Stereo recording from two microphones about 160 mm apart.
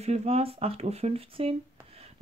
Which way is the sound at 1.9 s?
40° right (ahead or behind).